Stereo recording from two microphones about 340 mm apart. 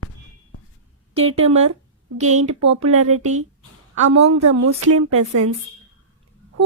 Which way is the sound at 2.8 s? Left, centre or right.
Right.